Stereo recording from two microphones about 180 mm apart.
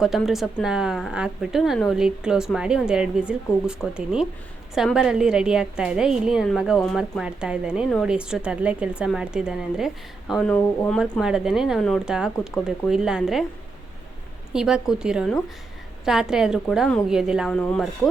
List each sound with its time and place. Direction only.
0.0 s a woman's voice: centre (ahead or behind)
14.5 s a woman's voice: 5° right (ahead or behind)